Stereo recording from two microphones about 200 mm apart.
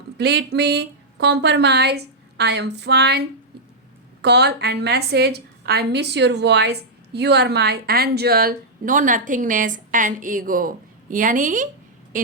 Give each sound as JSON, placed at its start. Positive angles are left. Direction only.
{"t": 0.2, "sound": "a woman's voice", "side_deg": -55}